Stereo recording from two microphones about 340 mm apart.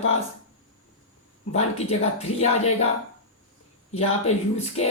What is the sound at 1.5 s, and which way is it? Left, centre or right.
Speech, centre.